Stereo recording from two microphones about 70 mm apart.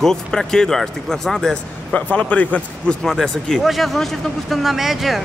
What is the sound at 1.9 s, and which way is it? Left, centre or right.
A man's voice, centre.